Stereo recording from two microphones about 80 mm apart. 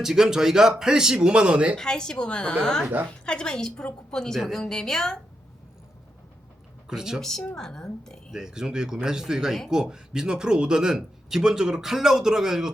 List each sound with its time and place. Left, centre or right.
0.0 s speech: centre
1.7 s speech: centre
6.8 s speech: centre
7.2 s speech: centre
8.3 s speech: centre